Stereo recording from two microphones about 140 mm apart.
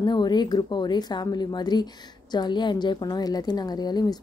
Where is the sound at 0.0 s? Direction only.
30° left (ahead or behind).